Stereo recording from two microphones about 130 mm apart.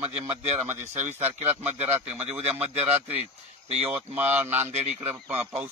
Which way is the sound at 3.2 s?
55° right (ahead or behind).